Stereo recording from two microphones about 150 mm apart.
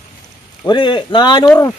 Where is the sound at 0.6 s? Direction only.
30° left (ahead or behind).